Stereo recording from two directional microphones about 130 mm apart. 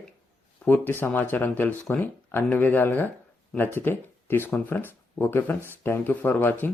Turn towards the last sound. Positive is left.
turn(degrees=15)  # may be behind; listen again after turning